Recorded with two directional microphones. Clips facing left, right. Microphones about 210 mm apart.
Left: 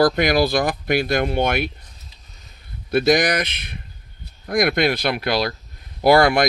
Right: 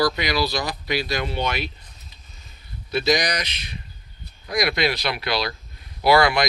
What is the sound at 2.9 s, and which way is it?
Speech, 50° left (ahead or behind).